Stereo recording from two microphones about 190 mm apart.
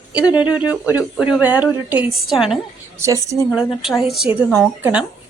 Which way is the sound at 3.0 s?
15° right (ahead or behind).